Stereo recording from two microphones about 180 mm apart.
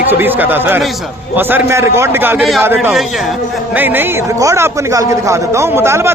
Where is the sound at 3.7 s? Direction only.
10° right (ahead or behind).